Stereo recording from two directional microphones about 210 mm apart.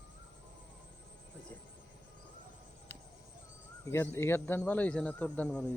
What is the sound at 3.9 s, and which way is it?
A man's voice, 10° left (ahead or behind).